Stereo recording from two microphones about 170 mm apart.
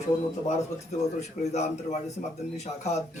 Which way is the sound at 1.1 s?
40° left (ahead or behind).